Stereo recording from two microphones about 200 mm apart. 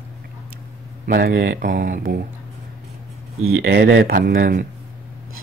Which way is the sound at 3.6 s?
50° right (ahead or behind).